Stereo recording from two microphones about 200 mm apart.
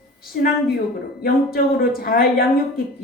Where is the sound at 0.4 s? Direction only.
45° left (ahead or behind).